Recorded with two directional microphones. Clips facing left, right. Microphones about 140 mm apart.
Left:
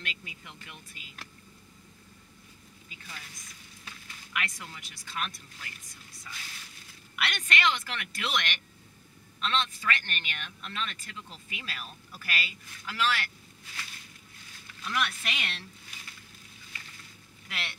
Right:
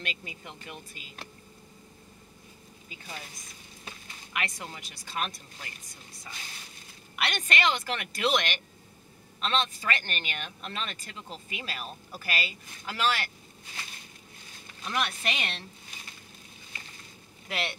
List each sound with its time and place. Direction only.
0.0 s a man's voice: 35° right (ahead or behind)
3.0 s a man's voice: 30° right (ahead or behind)
14.5 s a sound: 25° right (ahead or behind)
17.5 s speech: 30° right (ahead or behind)